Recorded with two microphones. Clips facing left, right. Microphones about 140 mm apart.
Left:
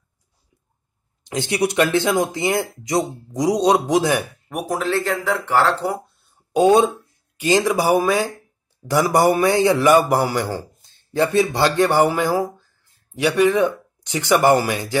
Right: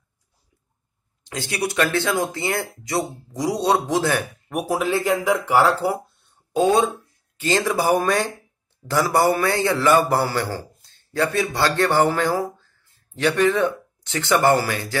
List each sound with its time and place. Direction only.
1.2 s speech: 20° left (ahead or behind)
4.5 s speech: 5° right (ahead or behind)
6.5 s a man's voice: 20° left (ahead or behind)
8.8 s a man's voice: 15° left (ahead or behind)